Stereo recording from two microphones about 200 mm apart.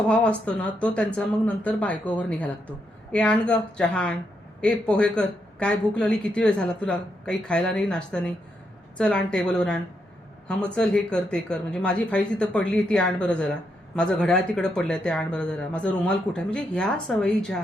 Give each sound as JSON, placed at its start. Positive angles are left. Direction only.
{"t": 0.1, "sound": "speech", "side_deg": 5}